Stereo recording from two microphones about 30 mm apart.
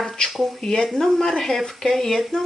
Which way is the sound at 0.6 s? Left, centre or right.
Left.